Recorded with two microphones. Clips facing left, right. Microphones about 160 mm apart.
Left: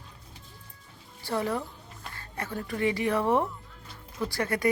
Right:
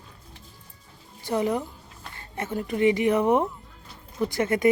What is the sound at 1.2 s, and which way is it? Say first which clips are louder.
A woman's voice: right 4 dB; 20° right (ahead or behind).